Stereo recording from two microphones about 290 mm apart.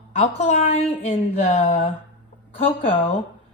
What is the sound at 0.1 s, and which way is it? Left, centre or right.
A woman's voice, left.